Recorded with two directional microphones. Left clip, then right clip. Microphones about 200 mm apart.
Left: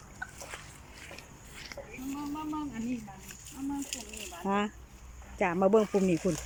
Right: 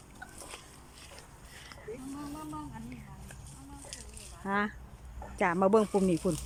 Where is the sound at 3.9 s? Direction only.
45° left (ahead or behind).